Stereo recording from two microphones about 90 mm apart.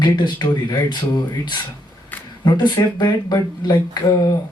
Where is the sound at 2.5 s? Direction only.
55° left (ahead or behind).